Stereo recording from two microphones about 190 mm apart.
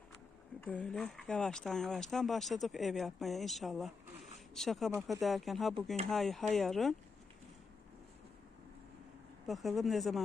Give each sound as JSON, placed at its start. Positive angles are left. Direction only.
{"t": 0.6, "sound": "speech", "side_deg": 10}
{"t": 9.5, "sound": "speech", "side_deg": 0}